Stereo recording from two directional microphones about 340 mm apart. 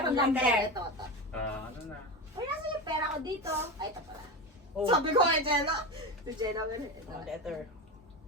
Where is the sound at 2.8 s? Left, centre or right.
Centre.